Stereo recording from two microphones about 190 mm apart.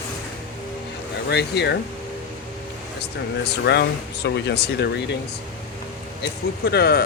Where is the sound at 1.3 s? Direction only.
60° left (ahead or behind).